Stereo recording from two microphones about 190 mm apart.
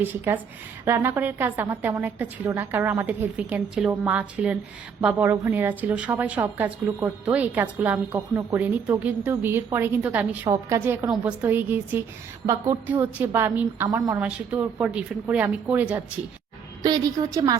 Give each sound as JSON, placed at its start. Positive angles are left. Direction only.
{"t": 0.0, "sound": "a woman's voice", "side_deg": -10}
{"t": 16.8, "sound": "a woman's voice", "side_deg": -20}